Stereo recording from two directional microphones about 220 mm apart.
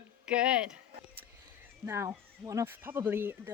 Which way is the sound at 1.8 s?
10° right (ahead or behind).